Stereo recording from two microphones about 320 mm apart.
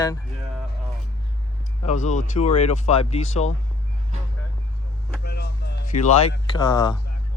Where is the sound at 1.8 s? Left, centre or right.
Left.